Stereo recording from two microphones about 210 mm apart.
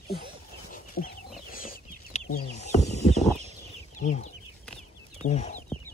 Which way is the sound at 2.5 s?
30° left (ahead or behind).